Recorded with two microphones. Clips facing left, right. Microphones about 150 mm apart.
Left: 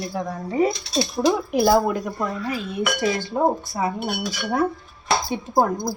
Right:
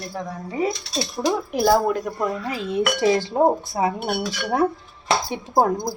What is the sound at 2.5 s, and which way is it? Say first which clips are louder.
Chink: right 2 dB; 30° right (ahead or behind).